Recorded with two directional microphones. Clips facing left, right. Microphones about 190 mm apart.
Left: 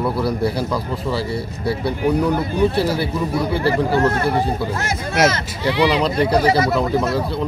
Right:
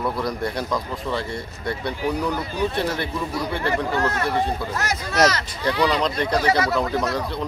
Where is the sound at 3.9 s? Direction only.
30° left (ahead or behind).